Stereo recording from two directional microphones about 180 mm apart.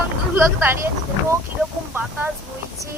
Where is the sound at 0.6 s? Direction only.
10° right (ahead or behind).